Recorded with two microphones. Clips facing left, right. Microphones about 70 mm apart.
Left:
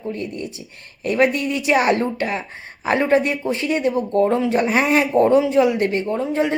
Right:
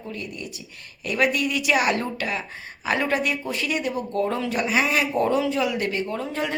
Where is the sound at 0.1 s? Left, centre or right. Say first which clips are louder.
Left 6 dB; left.